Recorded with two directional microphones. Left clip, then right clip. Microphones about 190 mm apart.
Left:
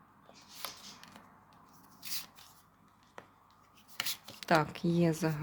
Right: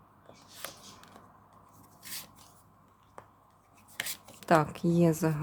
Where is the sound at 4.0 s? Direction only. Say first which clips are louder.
Even; 15° right (ahead or behind).